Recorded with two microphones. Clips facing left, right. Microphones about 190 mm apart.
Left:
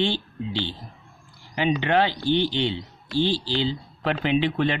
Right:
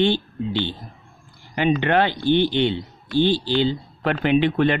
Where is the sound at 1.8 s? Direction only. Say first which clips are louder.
Right 3 dB; 55° right (ahead or behind).